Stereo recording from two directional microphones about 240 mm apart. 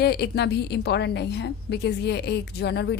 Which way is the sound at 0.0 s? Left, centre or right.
Left.